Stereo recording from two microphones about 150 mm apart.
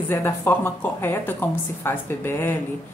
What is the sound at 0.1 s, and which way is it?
A woman's voice, 15° left (ahead or behind).